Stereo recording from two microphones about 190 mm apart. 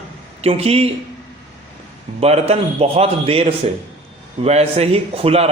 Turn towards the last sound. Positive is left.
turn(degrees=-30)  # may be behind; listen again after turning